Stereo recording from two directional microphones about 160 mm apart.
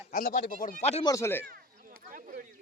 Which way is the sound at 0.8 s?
45° left (ahead or behind).